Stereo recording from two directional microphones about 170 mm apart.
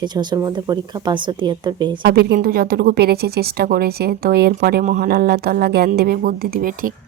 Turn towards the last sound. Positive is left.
turn(degrees=-55)  # may be behind; listen again after turning